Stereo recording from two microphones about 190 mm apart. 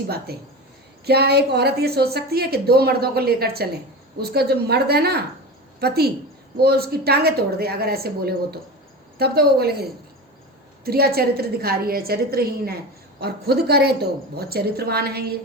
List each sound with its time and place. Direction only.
0.3 s a woman's voice: 55° right (ahead or behind)
10.8 s a woman's voice: 55° right (ahead or behind)